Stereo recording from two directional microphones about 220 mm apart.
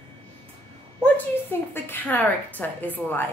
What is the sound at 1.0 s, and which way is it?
A woman's voice, 10° left (ahead or behind).